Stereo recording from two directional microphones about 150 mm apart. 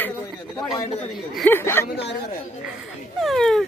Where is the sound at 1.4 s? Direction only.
15° left (ahead or behind).